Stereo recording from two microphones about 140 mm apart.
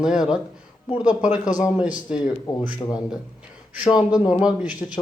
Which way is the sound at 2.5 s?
25° left (ahead or behind).